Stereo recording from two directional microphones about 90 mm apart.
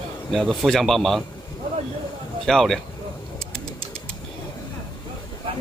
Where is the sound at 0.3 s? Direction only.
Centre (ahead or behind).